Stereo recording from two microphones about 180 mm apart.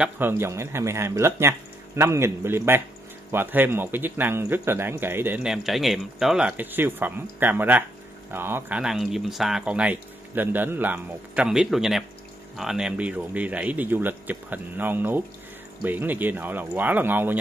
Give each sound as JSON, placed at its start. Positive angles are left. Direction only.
{"t": 0.0, "sound": "speech", "side_deg": -10}